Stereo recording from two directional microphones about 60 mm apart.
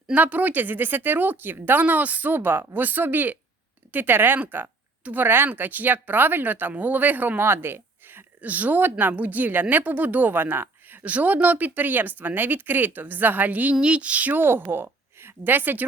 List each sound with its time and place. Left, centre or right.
0.1 s a woman's voice: right